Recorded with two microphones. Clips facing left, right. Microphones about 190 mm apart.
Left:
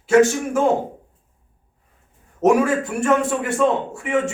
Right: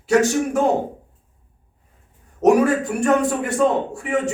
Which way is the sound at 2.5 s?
40° right (ahead or behind).